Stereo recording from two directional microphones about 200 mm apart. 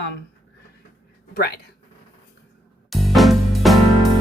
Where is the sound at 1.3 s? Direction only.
55° left (ahead or behind).